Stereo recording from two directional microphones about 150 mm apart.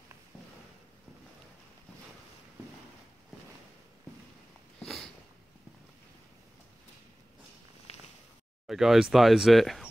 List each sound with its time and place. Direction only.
8.6 s speech: centre (ahead or behind)